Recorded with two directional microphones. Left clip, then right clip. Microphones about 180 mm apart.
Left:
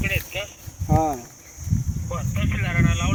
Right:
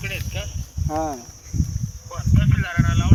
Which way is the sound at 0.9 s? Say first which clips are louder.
Left 3 dB; 30° right (ahead or behind).